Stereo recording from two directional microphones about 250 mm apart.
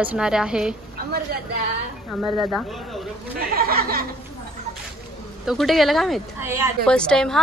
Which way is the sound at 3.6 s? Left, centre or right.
Right.